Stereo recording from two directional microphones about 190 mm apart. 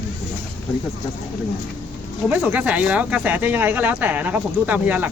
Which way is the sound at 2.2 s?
10° right (ahead or behind).